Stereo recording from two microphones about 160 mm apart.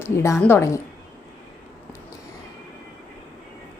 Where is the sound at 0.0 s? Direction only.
15° left (ahead or behind).